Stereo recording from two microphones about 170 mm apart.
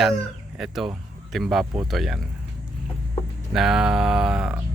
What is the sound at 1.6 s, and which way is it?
Speech, 20° right (ahead or behind).